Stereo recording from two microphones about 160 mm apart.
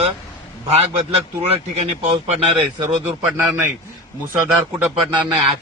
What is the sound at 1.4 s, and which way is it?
Speech, 40° right (ahead or behind).